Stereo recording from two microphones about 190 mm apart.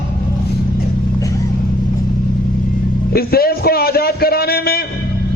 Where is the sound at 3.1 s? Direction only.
55° left (ahead or behind).